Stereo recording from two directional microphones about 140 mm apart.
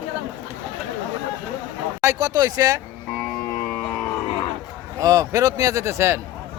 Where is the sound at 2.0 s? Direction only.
25° right (ahead or behind).